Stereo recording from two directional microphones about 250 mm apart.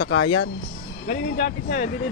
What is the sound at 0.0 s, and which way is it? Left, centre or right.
Speech, left.